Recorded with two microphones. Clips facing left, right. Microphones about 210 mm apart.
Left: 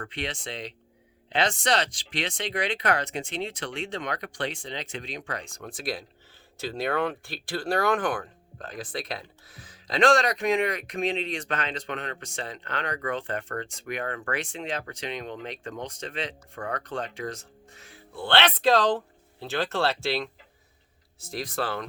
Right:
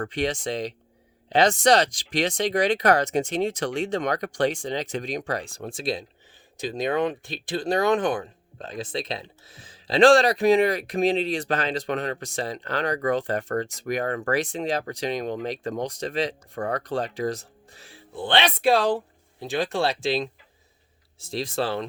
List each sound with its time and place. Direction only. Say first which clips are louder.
0.0 s speech: right 8 dB; 40° right (ahead or behind)
18.2 s speech: right 1 dB; 15° right (ahead or behind)